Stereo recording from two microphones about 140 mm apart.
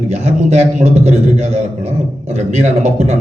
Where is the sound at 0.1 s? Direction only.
50° right (ahead or behind).